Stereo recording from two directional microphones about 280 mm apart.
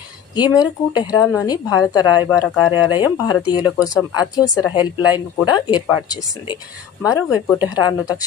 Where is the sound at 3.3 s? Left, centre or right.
Centre.